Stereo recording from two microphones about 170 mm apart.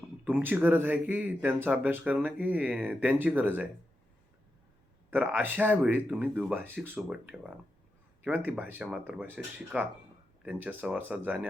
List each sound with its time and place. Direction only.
0.3 s speech: 10° right (ahead or behind)
5.1 s speech: 10° right (ahead or behind)